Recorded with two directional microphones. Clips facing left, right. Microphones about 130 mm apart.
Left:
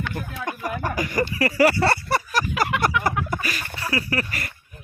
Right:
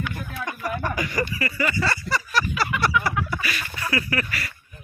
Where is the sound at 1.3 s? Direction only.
80° left; by 2.2 s 60° left (ahead or behind).